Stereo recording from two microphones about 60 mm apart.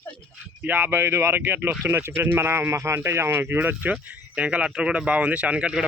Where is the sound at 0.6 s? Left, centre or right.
Right.